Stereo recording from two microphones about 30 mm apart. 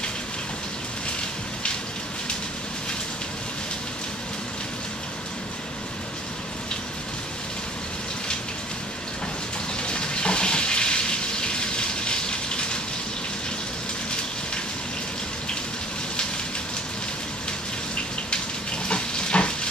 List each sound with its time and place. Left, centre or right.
9.8 s water: left
18.9 s frying: left